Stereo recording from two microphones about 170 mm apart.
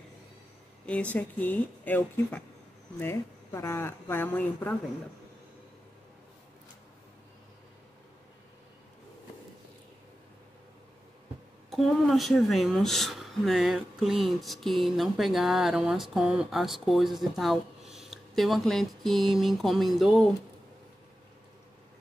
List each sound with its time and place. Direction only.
1.1 s speech: 10° left (ahead or behind)
11.7 s speech: centre (ahead or behind)